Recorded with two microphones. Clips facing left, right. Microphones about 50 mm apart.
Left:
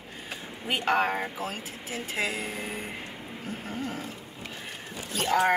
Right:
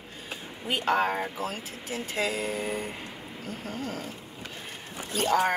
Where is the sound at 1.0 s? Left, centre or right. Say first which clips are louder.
Even; centre.